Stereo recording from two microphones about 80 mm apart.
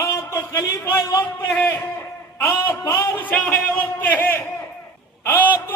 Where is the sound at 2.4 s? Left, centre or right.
Left.